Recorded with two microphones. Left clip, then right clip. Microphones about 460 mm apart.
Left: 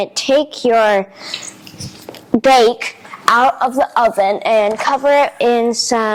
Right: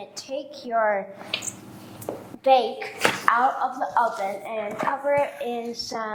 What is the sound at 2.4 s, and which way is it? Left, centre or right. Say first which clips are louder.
Speech: left 9 dB; left.